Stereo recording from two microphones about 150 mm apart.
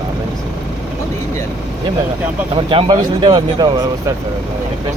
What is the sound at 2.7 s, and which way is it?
Speech, 35° right (ahead or behind).